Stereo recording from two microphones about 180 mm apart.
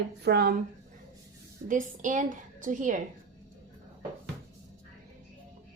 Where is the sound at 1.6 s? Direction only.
45° right (ahead or behind).